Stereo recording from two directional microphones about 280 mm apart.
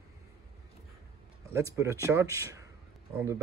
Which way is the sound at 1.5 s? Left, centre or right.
Centre.